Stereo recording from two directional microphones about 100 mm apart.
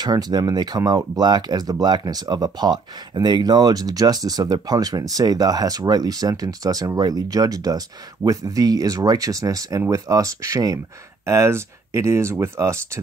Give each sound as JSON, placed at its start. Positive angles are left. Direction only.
{"t": 0.0, "sound": "speech", "side_deg": -40}